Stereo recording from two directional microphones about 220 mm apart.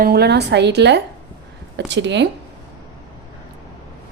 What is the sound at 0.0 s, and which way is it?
A woman's voice, 45° right (ahead or behind).